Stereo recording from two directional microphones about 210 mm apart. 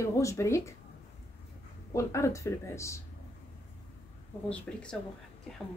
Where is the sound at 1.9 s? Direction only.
15° left (ahead or behind).